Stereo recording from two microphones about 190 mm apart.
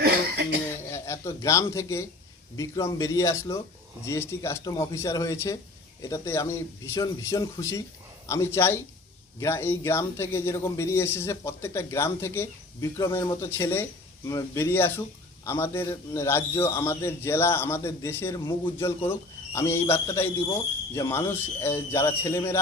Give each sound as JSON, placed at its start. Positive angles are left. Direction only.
{"t": 0.9, "sound": "a man's voice", "side_deg": 15}